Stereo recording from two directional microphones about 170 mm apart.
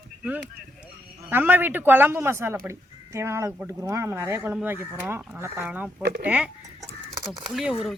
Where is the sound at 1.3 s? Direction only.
10° right (ahead or behind).